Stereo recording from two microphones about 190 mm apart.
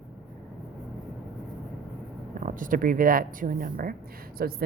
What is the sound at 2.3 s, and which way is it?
A woman's voice, 45° right (ahead or behind).